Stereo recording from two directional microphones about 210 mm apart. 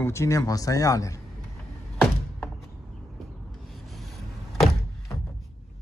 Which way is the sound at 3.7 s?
Centre (ahead or behind).